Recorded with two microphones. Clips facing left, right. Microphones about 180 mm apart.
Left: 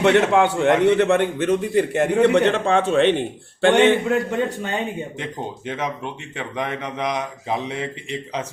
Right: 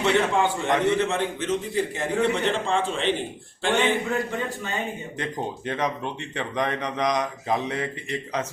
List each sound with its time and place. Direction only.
0.0 s a man's voice: 70° left (ahead or behind)
5.2 s speech: 5° left (ahead or behind)